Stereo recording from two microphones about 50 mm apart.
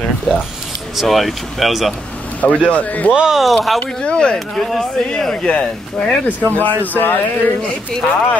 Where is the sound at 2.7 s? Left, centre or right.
Left.